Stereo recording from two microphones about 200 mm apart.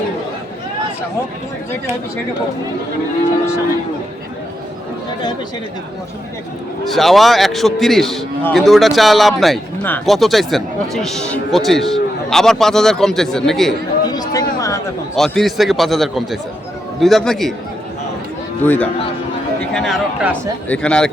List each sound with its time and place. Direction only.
6.9 s a man's voice: centre (ahead or behind)
14.1 s a sound: 20° left (ahead or behind)
15.1 s a man's voice: centre (ahead or behind)
18.6 s a man's voice: 10° left (ahead or behind)